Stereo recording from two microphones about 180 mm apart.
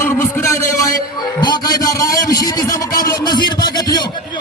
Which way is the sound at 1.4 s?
20° left (ahead or behind).